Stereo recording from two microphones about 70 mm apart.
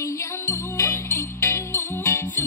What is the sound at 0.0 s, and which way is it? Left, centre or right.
Music, left.